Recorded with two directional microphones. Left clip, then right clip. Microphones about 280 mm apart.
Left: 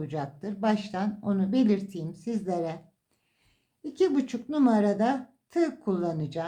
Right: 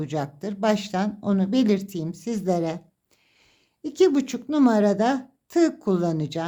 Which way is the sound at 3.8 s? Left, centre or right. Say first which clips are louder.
Right 6 dB; right.